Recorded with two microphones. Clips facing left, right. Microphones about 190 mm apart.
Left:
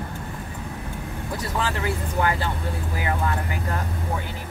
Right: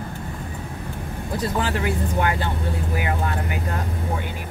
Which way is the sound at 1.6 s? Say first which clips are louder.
Right 3 dB; 20° right (ahead or behind).